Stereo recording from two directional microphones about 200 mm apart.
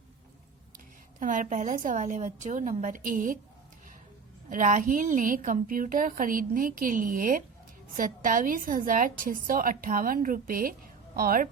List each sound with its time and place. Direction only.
1.2 s a woman's voice: 40° right (ahead or behind)
4.4 s a woman's voice: 40° right (ahead or behind)